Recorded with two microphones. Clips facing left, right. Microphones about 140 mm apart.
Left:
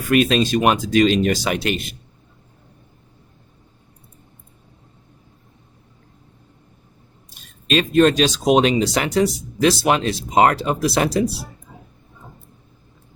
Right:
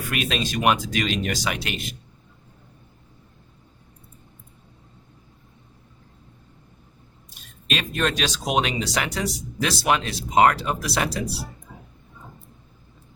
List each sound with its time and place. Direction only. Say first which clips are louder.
0.1 s speech: left 11 dB; 35° left (ahead or behind)
7.7 s speech: left 11 dB; 35° left (ahead or behind)